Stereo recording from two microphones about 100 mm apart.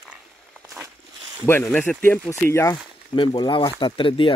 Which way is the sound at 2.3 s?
30° left (ahead or behind).